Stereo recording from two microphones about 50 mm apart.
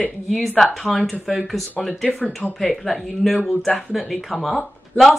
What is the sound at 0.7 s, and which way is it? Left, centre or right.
Speech, centre.